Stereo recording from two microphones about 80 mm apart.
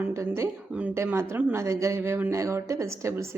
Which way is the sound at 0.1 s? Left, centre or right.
Right.